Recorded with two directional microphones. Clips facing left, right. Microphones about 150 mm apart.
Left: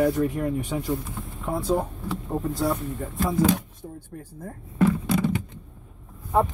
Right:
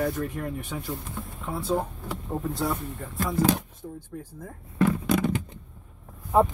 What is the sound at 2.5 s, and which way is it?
Speech, centre (ahead or behind).